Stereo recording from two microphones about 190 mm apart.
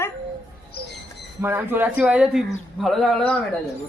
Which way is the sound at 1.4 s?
10° right (ahead or behind).